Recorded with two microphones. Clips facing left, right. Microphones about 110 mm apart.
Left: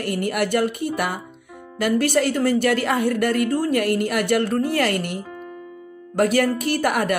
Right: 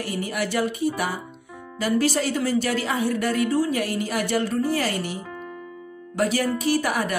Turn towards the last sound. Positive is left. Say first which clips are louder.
# left 2 dB
turn(degrees=60)  # may be behind; listen again after turning